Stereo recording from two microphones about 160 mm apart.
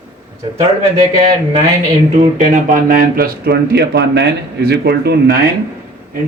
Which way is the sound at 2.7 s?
60° right (ahead or behind).